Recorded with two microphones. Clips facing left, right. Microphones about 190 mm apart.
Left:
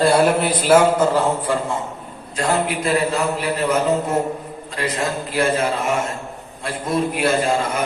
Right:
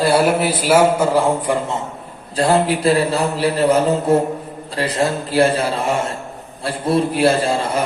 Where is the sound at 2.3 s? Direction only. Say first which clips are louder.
Right 5 dB; 35° right (ahead or behind).